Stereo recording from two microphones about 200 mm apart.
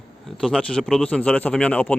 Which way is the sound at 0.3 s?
5° left (ahead or behind).